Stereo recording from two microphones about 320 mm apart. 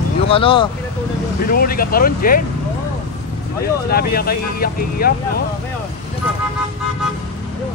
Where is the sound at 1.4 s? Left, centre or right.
Left.